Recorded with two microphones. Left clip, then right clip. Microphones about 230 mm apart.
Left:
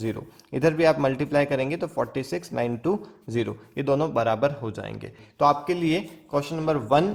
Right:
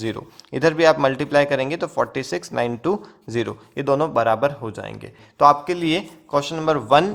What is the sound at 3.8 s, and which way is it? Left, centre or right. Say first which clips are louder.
Speech: right 4 dB; right.